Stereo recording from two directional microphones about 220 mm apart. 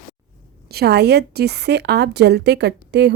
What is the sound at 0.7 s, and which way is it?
A woman's voice, 45° right (ahead or behind).